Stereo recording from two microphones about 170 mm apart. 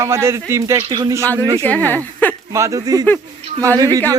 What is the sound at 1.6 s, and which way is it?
Speech, 10° left (ahead or behind).